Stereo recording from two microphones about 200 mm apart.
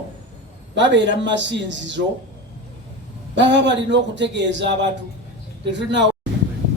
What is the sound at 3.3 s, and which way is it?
A man's voice, 60° right (ahead or behind).